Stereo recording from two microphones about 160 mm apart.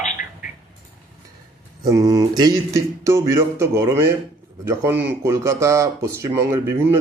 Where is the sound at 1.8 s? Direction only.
20° right (ahead or behind).